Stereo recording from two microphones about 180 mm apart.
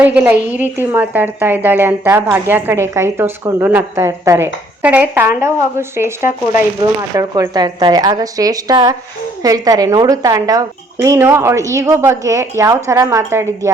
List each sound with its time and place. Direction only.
0.0 s a woman's voice: 10° right (ahead or behind)
7.2 s a woman's voice: 20° right (ahead or behind)